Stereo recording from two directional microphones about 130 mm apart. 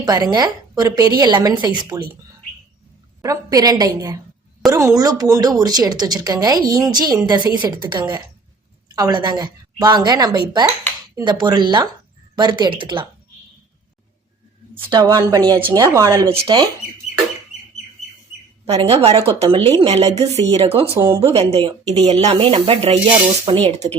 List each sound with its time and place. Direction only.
0.0 s a woman's voice: 30° right (ahead or behind)
3.2 s a woman's voice: 30° right (ahead or behind)
14.8 s a woman's voice: 35° right (ahead or behind)
15.8 s speech: 25° right (ahead or behind)
18.7 s speech: 45° right (ahead or behind)
19.9 s speech: 55° right (ahead or behind)